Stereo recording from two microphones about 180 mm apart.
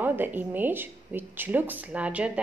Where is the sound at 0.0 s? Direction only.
10° right (ahead or behind).